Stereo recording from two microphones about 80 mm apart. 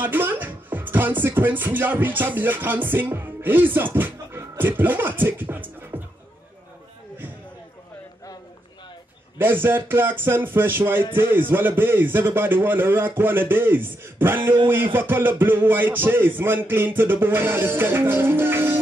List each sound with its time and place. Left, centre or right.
0.0 s music: right
9.4 s music: right